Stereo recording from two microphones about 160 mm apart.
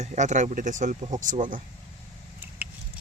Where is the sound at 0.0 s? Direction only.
50° right (ahead or behind).